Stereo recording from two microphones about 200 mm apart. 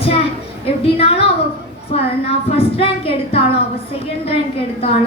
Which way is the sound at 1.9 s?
30° left (ahead or behind).